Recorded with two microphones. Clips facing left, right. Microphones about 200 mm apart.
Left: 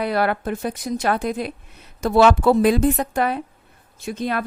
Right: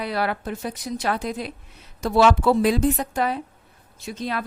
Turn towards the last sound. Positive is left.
turn(degrees=55)  # may be behind; listen again after turning